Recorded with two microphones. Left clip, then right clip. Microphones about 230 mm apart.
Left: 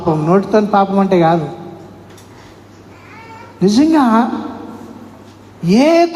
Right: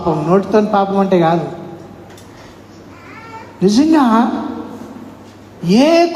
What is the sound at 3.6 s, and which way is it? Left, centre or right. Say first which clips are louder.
Speech: even; left.